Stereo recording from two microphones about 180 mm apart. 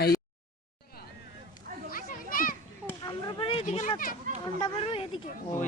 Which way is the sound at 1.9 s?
50° left (ahead or behind).